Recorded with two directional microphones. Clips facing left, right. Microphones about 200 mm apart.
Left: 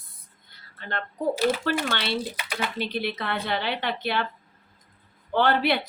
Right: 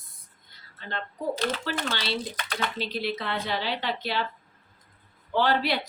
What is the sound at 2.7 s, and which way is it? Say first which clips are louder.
Speech: left 1 dB; 60° left (ahead or behind).